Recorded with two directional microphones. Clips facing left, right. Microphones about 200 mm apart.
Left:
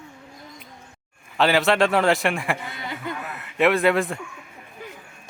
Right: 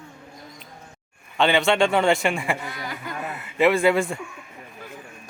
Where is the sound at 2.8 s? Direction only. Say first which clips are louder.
Left 2 dB; 25° left (ahead or behind).